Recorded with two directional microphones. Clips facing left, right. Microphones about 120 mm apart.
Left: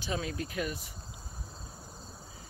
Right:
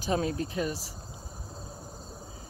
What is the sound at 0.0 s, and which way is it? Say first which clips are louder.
Speech: right 6 dB; 40° right (ahead or behind).